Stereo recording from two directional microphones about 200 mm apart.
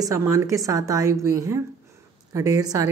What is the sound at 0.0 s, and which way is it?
Speech, 15° right (ahead or behind).